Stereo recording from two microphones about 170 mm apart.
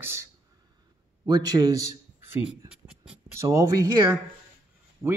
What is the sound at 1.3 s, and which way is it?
A man's voice, 20° right (ahead or behind).